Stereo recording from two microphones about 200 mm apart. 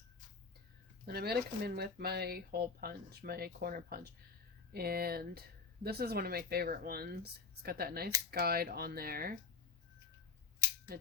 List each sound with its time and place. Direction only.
1.0 s speech: 50° right (ahead or behind)